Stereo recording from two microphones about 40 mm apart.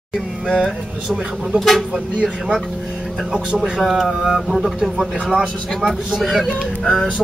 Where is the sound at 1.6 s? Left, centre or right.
Centre.